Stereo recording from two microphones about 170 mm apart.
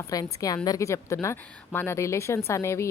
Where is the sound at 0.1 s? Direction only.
20° left (ahead or behind).